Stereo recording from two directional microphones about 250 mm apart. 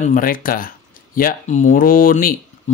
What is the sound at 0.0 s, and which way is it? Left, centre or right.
Speech, left.